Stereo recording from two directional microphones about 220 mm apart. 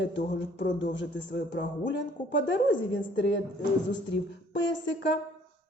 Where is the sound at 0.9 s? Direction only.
55° left (ahead or behind).